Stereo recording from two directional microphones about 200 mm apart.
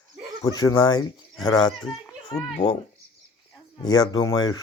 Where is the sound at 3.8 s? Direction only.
20° left (ahead or behind).